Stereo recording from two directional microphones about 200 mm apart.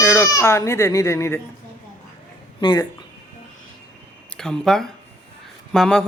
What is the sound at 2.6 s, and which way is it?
Speech, 20° left (ahead or behind).